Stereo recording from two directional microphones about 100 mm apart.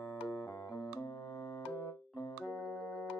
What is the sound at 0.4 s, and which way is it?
Music, 30° left (ahead or behind).